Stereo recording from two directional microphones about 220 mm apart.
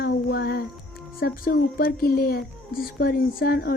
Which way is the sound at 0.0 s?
45° left (ahead or behind).